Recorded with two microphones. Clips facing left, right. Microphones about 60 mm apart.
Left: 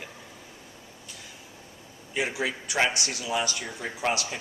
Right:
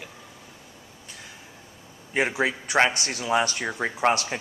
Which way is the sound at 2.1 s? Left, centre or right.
Right.